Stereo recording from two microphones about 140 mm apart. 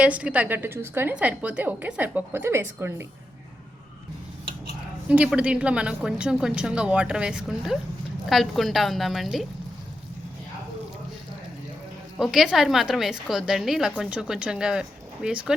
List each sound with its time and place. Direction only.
0.0 s a woman's voice: 10° right (ahead or behind)
5.0 s a woman's voice: 10° right (ahead or behind)
12.1 s a woman's voice: centre (ahead or behind)